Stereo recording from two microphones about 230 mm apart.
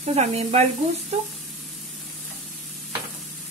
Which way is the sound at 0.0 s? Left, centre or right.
Right.